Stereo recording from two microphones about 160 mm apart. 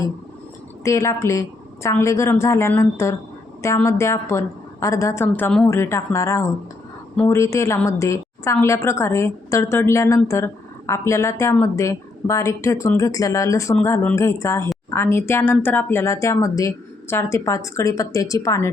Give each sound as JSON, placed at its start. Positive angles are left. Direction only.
{"t": 0.9, "sound": "a woman's voice", "side_deg": 20}